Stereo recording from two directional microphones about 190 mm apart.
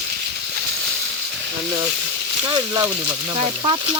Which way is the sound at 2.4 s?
20° right (ahead or behind).